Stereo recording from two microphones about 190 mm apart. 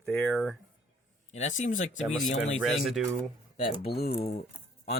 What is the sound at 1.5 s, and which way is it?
Speech, 40° left (ahead or behind).